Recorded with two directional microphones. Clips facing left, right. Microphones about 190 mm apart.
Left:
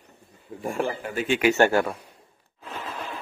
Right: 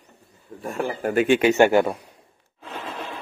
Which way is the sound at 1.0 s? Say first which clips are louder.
Right 7 dB; 60° right (ahead or behind).